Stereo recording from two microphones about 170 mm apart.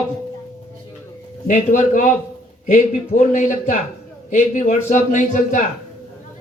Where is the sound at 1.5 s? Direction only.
45° left (ahead or behind).